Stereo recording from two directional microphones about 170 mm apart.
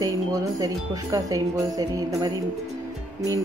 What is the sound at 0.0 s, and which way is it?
Speech, 20° right (ahead or behind).